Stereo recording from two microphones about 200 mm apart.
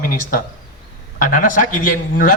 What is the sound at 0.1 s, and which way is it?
A man's voice, 45° left (ahead or behind).